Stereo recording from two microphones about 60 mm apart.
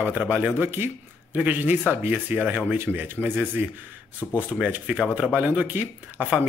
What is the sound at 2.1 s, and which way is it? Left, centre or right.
Speech, right.